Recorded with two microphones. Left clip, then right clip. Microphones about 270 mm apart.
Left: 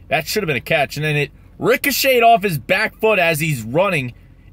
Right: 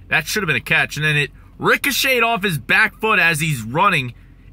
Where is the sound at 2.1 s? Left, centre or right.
Left.